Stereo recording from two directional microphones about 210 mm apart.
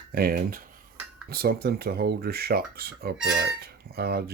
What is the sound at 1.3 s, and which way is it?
Cutlery, 45° right (ahead or behind).